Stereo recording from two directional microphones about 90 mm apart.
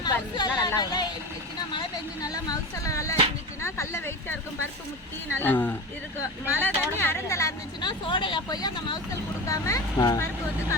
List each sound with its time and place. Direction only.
0.0 s speech: 50° left (ahead or behind)
2.2 s speech: 45° left (ahead or behind); by 4.4 s 30° left (ahead or behind)
5.4 s speech: 20° left (ahead or behind)
7.8 s speech: 60° left (ahead or behind)
9.5 s speech: 35° left (ahead or behind)